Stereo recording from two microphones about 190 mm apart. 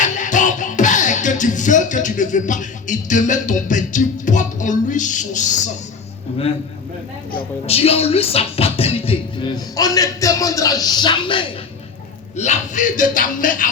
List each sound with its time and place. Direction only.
0.0 s music: 40° left (ahead or behind)
7.7 s music: 30° left (ahead or behind)
12.4 s speech: 40° left (ahead or behind)